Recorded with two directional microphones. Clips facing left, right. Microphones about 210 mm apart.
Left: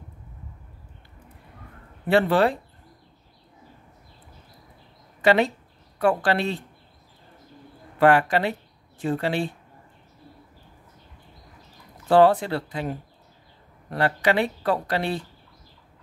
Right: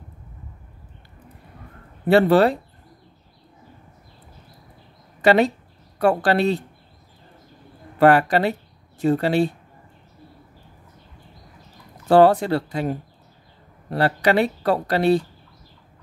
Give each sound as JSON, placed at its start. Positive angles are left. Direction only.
{"t": 2.0, "sound": "speech", "side_deg": -40}
{"t": 5.2, "sound": "speech", "side_deg": -40}
{"t": 8.0, "sound": "speech", "side_deg": -40}
{"t": 12.1, "sound": "speech", "side_deg": -40}